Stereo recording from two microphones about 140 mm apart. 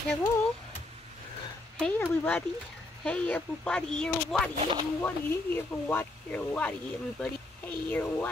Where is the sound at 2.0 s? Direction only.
15° left (ahead or behind).